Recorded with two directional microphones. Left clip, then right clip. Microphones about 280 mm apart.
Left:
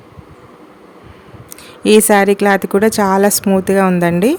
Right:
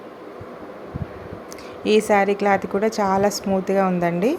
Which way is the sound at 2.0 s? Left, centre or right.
Left.